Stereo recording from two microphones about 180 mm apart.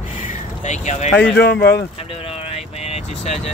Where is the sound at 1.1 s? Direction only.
65° left (ahead or behind).